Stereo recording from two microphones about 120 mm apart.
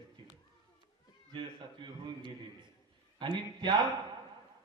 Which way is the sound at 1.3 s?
40° right (ahead or behind).